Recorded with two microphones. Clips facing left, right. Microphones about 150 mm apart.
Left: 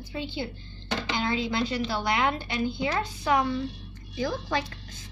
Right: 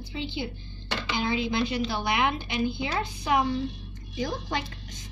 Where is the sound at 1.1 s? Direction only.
15° right (ahead or behind).